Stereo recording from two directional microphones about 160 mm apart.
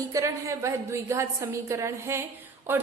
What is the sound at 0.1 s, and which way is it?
A woman's voice, 20° right (ahead or behind).